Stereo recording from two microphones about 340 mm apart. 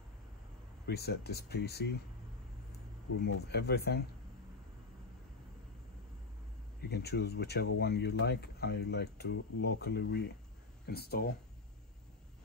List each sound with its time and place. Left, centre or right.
0.8 s speech: left
3.2 s speech: left
6.9 s speech: left